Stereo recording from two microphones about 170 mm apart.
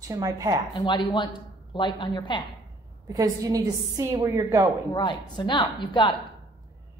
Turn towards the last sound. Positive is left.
turn(degrees=25)  # may be behind; listen again after turning